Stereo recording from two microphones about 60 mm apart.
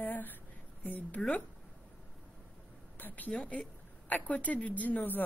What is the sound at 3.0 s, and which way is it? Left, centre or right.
Speech, left.